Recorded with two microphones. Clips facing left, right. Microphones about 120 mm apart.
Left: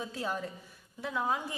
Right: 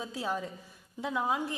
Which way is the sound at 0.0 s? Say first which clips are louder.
Right 1 dB; 10° right (ahead or behind).